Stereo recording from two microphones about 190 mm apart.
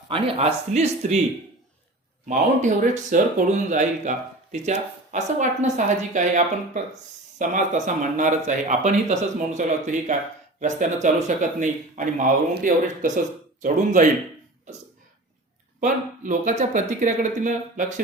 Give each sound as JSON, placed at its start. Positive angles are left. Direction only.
{"t": 0.1, "sound": "a woman's voice", "side_deg": -35}
{"t": 2.2, "sound": "a woman's voice", "side_deg": -40}
{"t": 15.8, "sound": "a woman's voice", "side_deg": -40}